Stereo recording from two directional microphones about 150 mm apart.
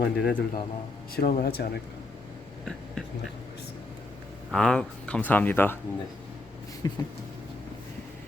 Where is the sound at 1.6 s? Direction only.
90° left.